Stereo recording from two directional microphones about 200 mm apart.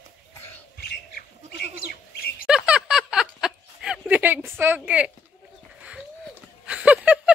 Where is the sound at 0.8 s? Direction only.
50° left (ahead or behind).